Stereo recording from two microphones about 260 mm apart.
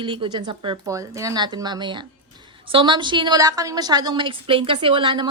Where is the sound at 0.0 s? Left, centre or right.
Centre.